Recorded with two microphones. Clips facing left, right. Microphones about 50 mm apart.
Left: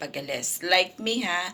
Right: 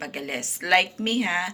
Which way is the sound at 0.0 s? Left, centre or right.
Right.